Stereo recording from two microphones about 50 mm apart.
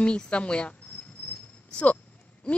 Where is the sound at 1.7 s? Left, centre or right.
Centre.